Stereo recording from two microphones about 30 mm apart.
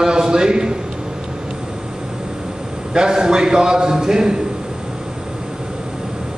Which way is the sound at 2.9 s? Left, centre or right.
Right.